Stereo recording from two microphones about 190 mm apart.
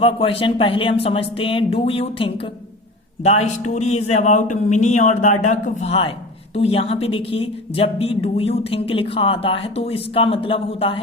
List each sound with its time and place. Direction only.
0.0 s a woman's voice: 30° left (ahead or behind)